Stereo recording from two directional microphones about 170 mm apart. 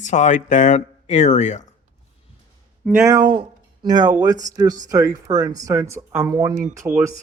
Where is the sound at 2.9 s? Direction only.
15° right (ahead or behind).